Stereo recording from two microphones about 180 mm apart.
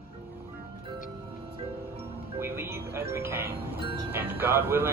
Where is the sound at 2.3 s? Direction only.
10° right (ahead or behind).